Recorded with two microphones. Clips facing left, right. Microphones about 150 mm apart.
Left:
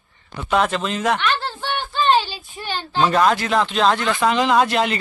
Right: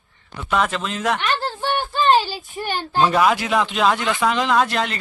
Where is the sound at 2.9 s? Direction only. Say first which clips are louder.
Even; 5° right (ahead or behind).